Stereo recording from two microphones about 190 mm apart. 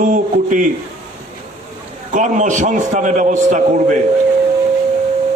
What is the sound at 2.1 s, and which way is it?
A man's voice, 40° right (ahead or behind).